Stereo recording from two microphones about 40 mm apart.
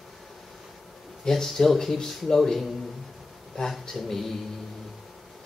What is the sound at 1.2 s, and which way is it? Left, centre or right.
Speech, centre.